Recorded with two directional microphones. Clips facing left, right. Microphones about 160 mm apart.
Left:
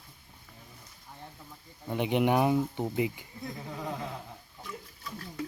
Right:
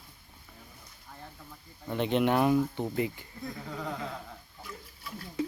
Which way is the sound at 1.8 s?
15° left (ahead or behind).